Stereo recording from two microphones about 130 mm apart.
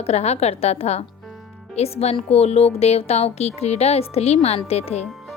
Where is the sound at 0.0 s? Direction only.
55° left (ahead or behind).